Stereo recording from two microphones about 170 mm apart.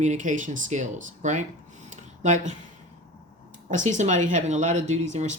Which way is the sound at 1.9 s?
45° right (ahead or behind).